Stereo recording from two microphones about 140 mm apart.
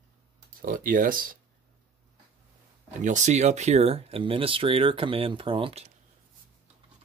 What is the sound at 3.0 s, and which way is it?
Speech, 60° right (ahead or behind).